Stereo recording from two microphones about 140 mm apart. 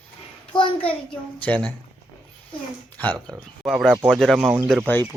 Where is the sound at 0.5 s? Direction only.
40° left (ahead or behind).